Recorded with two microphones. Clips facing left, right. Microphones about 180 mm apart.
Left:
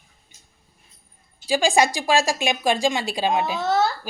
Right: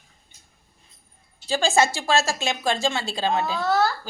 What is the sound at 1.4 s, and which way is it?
A woman's voice, 10° left (ahead or behind).